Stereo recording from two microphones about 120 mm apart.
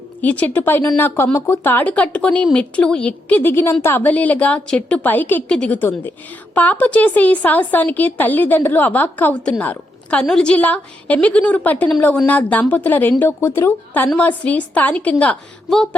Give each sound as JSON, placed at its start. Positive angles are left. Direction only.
{"t": 0.2, "sound": "speech", "side_deg": 15}